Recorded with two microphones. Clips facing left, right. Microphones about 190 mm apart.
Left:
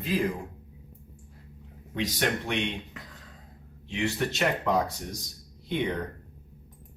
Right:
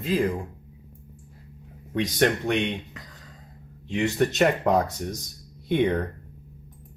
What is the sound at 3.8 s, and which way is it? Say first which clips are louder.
Speech: right 6 dB; 50° right (ahead or behind).